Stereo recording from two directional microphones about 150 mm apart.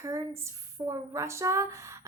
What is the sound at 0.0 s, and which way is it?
Speech, 25° right (ahead or behind).